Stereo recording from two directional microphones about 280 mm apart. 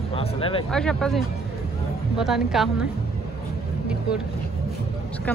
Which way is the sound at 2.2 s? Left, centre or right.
Centre.